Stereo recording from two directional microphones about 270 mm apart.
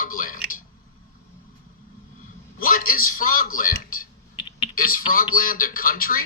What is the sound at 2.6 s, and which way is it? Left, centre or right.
A man's voice, left.